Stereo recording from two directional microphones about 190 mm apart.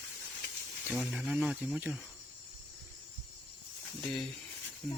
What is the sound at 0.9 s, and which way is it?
Speech, centre (ahead or behind).